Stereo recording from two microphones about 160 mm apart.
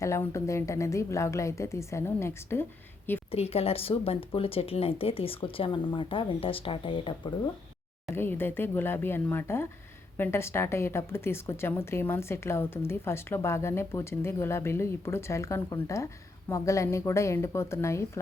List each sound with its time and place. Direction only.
0.0 s a woman's voice: 20° left (ahead or behind)
3.3 s speech: 40° left (ahead or behind)
8.1 s a woman's voice: 15° left (ahead or behind)